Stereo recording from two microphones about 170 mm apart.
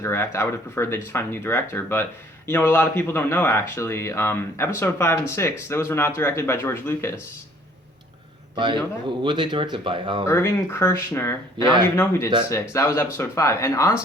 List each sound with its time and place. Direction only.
0.0 s speech: 15° left (ahead or behind)
8.5 s a man's voice: 30° right (ahead or behind)
10.2 s speech: 15° left (ahead or behind)